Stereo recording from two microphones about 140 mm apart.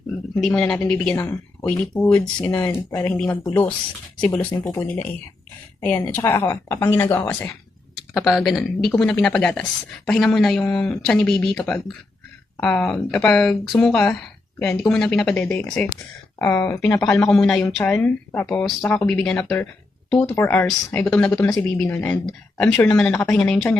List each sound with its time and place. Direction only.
0.3 s speech: 5° left (ahead or behind)
1.1 s speech: 15° left (ahead or behind)
6.1 s speech: 15° left (ahead or behind)
8.1 s speech: centre (ahead or behind); by 17.0 s 20° left (ahead or behind)
17.0 s speech: 5° left (ahead or behind)
17.9 s speech: 15° left (ahead or behind)